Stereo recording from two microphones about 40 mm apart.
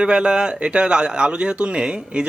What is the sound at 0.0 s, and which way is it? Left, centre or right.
Speech, right.